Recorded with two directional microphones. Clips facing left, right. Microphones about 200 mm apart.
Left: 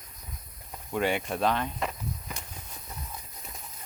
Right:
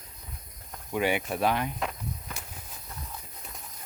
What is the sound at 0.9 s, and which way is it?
Speech, 5° right (ahead or behind).